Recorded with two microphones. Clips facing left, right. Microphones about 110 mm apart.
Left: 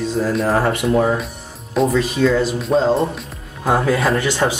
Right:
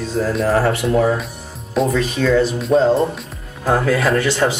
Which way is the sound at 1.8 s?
Centre (ahead or behind).